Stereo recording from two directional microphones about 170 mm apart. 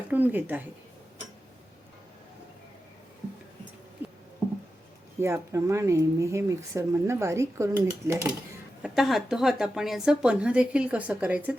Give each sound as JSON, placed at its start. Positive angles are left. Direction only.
{"t": 0.1, "sound": "speech", "side_deg": -10}
{"t": 4.0, "sound": "a sound", "side_deg": -10}
{"t": 5.2, "sound": "speech", "side_deg": -15}
{"t": 8.8, "sound": "a woman's voice", "side_deg": 0}